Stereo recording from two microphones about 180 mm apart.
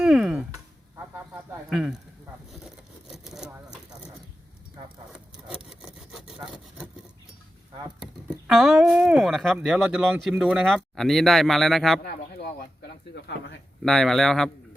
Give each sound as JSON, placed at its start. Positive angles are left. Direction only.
{"t": 0.0, "sound": "a sound", "side_deg": -5}
{"t": 1.7, "sound": "speech", "side_deg": -5}
{"t": 3.1, "sound": "vehicle", "side_deg": 0}
{"t": 5.5, "sound": "sawing", "side_deg": -5}
{"t": 7.9, "sound": "speech", "side_deg": 0}
{"t": 12.0, "sound": "a sound", "side_deg": 60}
{"t": 13.8, "sound": "speech", "side_deg": 5}